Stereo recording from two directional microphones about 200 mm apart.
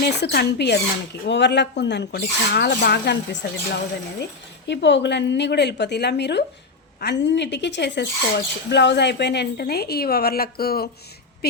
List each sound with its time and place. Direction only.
0.0 s a woman's voice: 55° left (ahead or behind)